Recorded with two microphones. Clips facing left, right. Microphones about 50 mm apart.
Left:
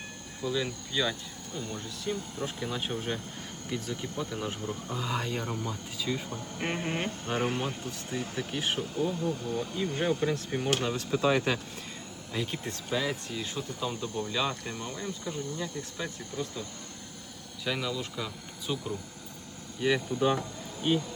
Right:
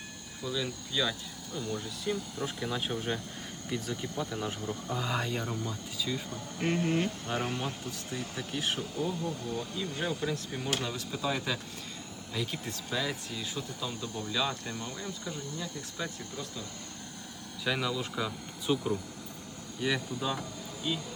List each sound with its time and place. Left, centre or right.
0.4 s speech: centre
9.7 s speech: centre
10.9 s speech: left
12.3 s speech: centre
14.0 s speech: left
17.7 s speech: centre
19.8 s speech: centre